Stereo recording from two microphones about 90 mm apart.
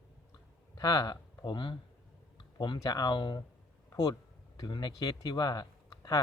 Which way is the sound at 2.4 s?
60° left (ahead or behind).